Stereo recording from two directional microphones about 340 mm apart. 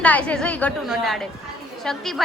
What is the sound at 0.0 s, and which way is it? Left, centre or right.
A woman's voice, centre.